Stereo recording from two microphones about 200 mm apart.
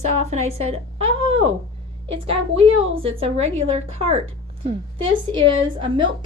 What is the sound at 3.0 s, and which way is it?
Speech, 30° right (ahead or behind).